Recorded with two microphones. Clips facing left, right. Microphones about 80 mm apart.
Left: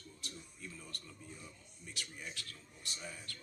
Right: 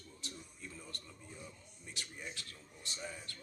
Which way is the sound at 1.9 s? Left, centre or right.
Centre.